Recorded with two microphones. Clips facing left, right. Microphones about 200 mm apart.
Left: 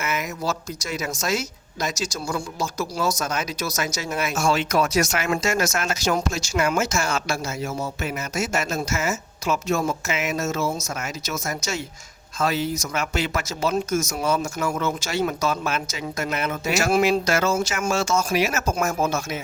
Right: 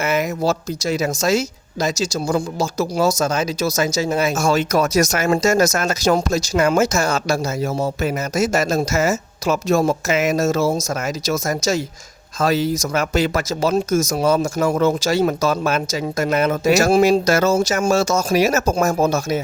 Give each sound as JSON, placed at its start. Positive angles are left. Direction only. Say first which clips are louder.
{"t": 0.0, "sound": "speech", "louder": "right 8 dB", "side_deg": -30}
{"t": 2.6, "sound": "speech", "louder": "right 7 dB", "side_deg": -80}
{"t": 3.2, "sound": "speech", "louder": "right 7 dB", "side_deg": -30}
{"t": 4.4, "sound": "speech", "louder": "even", "side_deg": -40}
{"t": 12.4, "sound": "speech", "louder": "right 6 dB", "side_deg": -35}